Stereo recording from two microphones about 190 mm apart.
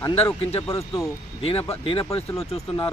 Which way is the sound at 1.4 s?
30° left (ahead or behind).